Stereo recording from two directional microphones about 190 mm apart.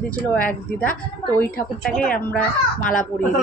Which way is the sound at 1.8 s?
5° left (ahead or behind).